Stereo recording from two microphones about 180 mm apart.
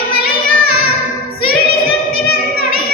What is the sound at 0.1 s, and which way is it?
Child singing, 60° left (ahead or behind).